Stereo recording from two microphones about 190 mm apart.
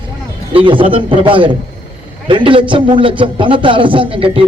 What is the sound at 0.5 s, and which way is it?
A man's voice, 25° right (ahead or behind).